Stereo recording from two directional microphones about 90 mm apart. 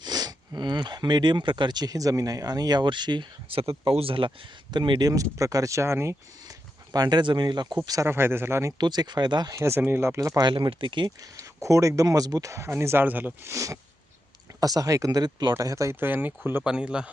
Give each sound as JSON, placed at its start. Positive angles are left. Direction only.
{"t": 0.0, "sound": "speech", "side_deg": -50}
{"t": 6.4, "sound": "a sound", "side_deg": -45}
{"t": 8.0, "sound": "speech", "side_deg": -25}
{"t": 8.8, "sound": "speech", "side_deg": -50}
{"t": 9.6, "sound": "speech", "side_deg": -30}
{"t": 10.5, "sound": "speech", "side_deg": -70}
{"t": 11.2, "sound": "speech", "side_deg": -40}
{"t": 13.4, "sound": "speech", "side_deg": -35}
{"t": 15.5, "sound": "speech", "side_deg": -35}
{"t": 16.6, "sound": "speech", "side_deg": -10}